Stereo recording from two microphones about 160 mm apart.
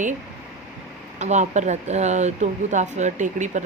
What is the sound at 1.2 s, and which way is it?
Speech, 45° right (ahead or behind).